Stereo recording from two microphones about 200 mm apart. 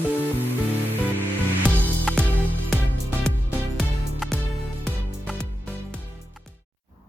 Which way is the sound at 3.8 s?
5° left (ahead or behind).